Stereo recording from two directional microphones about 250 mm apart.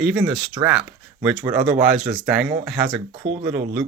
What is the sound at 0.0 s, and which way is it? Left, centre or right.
Speech, centre.